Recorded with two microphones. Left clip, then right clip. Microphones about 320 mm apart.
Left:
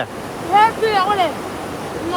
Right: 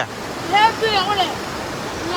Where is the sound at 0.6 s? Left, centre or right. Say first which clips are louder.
Left 1 dB; left.